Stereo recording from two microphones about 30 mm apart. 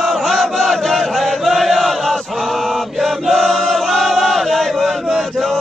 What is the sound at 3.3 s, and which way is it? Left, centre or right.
Choir, centre.